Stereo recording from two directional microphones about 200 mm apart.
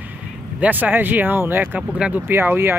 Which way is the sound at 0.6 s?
10° right (ahead or behind).